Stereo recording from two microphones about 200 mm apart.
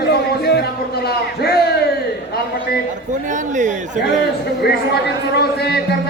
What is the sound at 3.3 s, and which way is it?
Speech, 40° right (ahead or behind).